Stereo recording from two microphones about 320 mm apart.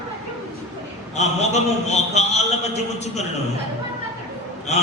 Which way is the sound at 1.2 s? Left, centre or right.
Left.